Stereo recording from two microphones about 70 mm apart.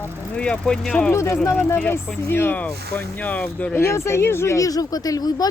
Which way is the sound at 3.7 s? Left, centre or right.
Left.